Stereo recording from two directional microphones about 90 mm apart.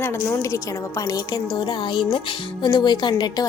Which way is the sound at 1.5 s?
60° left (ahead or behind).